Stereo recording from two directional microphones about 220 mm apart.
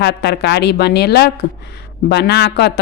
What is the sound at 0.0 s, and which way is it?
Speech, 50° left (ahead or behind).